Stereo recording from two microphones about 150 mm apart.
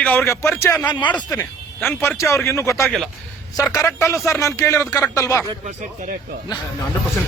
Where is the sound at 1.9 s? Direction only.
15° left (ahead or behind).